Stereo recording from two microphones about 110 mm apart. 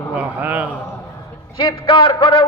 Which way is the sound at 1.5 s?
55° left (ahead or behind).